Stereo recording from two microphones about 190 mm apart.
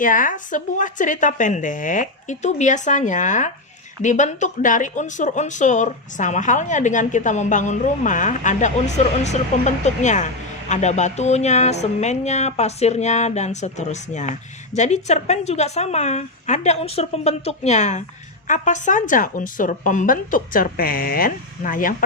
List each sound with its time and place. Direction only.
0.0 s a woman's voice: 45° left (ahead or behind)